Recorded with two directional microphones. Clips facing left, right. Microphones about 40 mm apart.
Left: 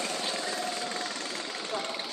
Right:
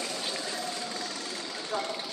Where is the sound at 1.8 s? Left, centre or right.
Left.